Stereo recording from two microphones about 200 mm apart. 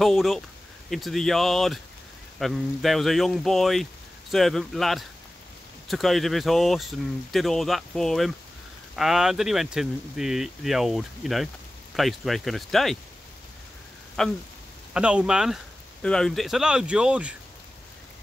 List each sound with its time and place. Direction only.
0.0 s speech: centre (ahead or behind)
14.2 s speech: centre (ahead or behind)